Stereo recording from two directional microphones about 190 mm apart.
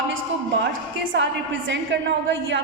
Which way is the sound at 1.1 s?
70° right (ahead or behind).